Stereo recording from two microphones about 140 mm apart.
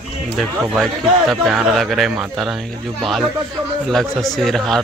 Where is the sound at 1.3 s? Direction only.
Centre (ahead or behind).